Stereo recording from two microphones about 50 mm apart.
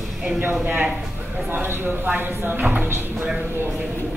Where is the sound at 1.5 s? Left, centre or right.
Right.